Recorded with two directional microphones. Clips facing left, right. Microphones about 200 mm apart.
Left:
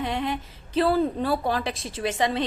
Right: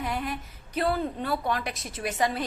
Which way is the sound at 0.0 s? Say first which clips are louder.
Left 4 dB; 25° left (ahead or behind).